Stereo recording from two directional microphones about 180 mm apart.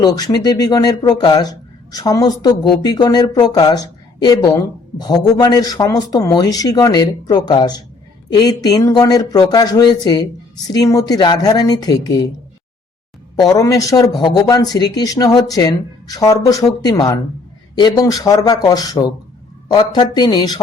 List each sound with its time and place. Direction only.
0.0 s speech: 20° left (ahead or behind)
13.3 s speech: 20° left (ahead or behind)